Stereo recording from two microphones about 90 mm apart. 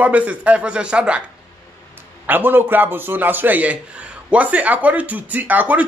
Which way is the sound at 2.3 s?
20° right (ahead or behind).